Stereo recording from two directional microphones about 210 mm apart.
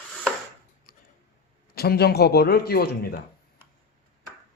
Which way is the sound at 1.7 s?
50° left (ahead or behind).